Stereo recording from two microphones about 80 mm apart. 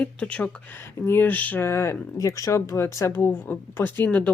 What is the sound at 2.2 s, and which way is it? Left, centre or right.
Speech, left.